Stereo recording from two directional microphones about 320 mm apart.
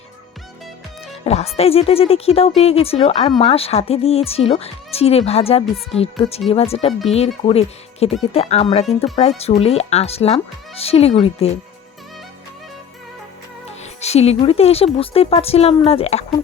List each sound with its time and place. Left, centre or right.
1.1 s a woman's voice: centre
14.0 s a woman's voice: centre